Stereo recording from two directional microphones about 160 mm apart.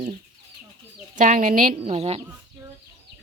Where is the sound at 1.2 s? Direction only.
55° right (ahead or behind).